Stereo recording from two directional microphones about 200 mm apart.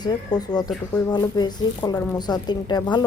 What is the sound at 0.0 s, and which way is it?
Speech, 20° left (ahead or behind).